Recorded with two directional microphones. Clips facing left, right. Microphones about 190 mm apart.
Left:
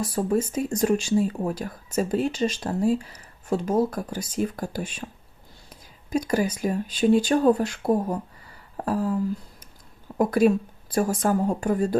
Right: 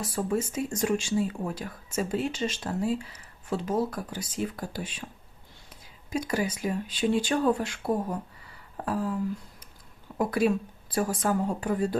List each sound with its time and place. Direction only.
0.3 s speech: 40° left (ahead or behind)
6.1 s speech: 40° left (ahead or behind)
10.2 s speech: 45° left (ahead or behind)